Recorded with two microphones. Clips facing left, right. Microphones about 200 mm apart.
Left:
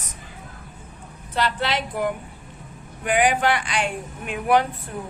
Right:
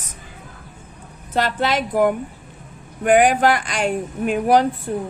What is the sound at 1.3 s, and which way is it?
Speech, 45° right (ahead or behind).